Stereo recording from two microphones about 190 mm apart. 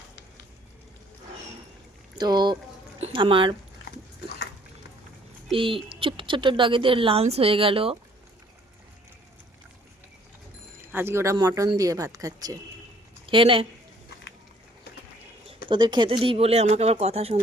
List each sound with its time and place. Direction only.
2.1 s speech: 20° right (ahead or behind)
5.5 s speech: 30° right (ahead or behind)
10.8 s a woman's voice: 10° right (ahead or behind); by 13.7 s 30° right (ahead or behind)
15.7 s speech: 25° right (ahead or behind)